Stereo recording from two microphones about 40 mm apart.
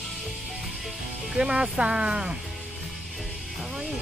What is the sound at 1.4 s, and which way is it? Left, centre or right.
Speech, centre.